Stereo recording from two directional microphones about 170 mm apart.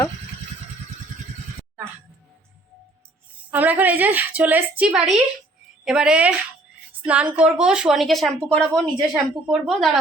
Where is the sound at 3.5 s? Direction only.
10° right (ahead or behind).